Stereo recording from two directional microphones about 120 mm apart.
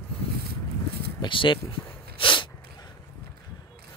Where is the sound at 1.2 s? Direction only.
45° left (ahead or behind).